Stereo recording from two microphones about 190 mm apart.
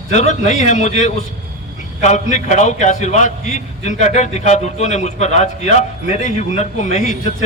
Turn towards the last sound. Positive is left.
turn(degrees=35)  # may be behind; listen again after turning